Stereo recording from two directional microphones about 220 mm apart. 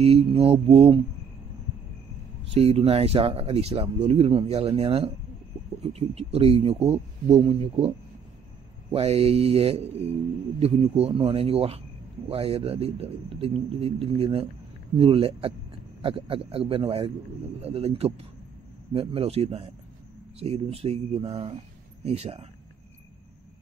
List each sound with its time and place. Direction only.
0.0 s speech: 25° right (ahead or behind)
2.5 s speech: 25° right (ahead or behind)
8.9 s speech: 25° right (ahead or behind)